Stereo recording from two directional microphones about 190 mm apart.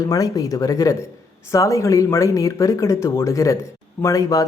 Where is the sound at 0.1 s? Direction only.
20° left (ahead or behind).